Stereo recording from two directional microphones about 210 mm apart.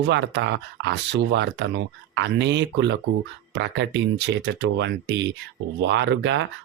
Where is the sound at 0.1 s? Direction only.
60° right (ahead or behind).